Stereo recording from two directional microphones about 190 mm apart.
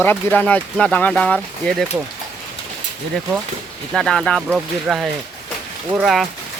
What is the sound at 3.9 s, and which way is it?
Speech, centre (ahead or behind).